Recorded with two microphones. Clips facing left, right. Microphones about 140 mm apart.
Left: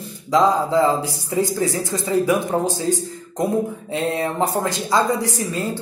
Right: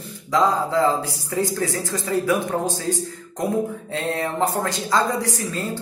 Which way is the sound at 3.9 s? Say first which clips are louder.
Left 3 dB; 15° left (ahead or behind).